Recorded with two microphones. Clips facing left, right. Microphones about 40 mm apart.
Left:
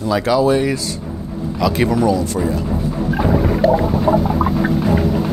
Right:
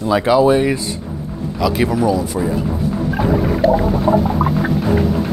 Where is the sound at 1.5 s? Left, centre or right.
Centre.